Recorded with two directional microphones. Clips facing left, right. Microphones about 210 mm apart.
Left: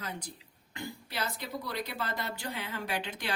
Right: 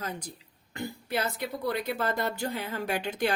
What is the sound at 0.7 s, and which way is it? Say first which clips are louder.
Speech: right 8 dB; 50° right (ahead or behind).